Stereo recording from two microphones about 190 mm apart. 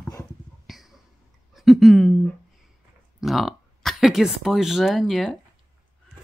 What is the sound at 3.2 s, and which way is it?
Speech, centre (ahead or behind).